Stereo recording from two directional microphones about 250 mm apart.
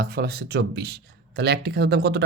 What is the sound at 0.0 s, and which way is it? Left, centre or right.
Speech, right.